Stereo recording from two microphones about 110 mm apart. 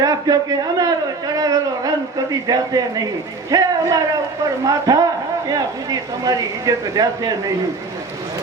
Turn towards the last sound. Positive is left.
turn(degrees=-35)  # may be behind; listen again after turning